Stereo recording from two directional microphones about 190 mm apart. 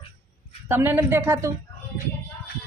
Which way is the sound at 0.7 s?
10° right (ahead or behind).